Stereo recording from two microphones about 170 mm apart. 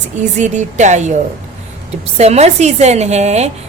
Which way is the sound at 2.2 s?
40° right (ahead or behind).